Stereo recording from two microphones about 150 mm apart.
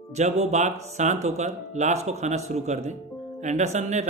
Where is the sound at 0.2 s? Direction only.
50° right (ahead or behind).